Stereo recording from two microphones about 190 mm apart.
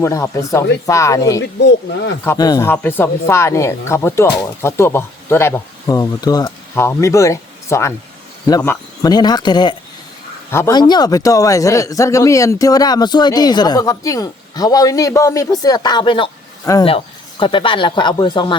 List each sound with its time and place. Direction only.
0.0 s speech: 15° left (ahead or behind)
1.4 s speech: 65° left (ahead or behind)
2.2 s a man's voice: 15° left (ahead or behind)